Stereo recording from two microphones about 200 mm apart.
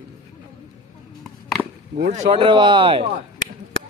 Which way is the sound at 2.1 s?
30° right (ahead or behind).